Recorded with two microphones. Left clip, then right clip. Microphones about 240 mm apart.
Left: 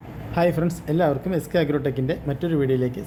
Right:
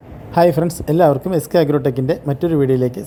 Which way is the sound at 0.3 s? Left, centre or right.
Right.